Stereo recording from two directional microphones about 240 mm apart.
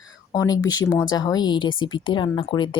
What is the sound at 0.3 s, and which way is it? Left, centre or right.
A woman's voice, centre.